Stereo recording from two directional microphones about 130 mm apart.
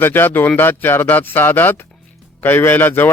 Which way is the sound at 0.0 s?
15° left (ahead or behind).